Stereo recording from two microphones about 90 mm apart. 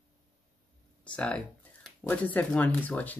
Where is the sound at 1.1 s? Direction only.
10° left (ahead or behind).